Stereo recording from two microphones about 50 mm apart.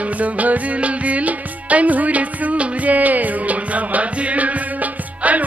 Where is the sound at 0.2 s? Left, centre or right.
Right.